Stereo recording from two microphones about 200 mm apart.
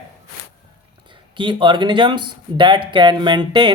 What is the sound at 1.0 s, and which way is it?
Speech, 25° right (ahead or behind).